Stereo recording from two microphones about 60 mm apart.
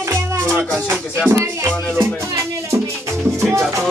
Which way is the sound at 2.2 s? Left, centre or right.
Right.